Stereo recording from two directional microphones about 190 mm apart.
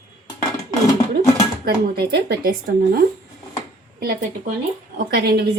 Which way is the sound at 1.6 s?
60° right (ahead or behind).